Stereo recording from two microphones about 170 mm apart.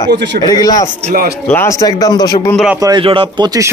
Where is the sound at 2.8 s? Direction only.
30° right (ahead or behind).